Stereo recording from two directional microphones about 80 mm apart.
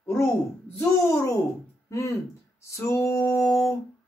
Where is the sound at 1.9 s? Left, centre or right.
Left.